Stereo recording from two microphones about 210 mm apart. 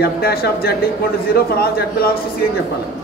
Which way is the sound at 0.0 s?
45° left (ahead or behind).